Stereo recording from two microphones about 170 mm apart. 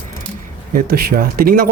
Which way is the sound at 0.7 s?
65° right (ahead or behind).